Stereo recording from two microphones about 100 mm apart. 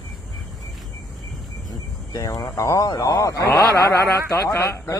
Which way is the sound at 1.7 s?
35° left (ahead or behind).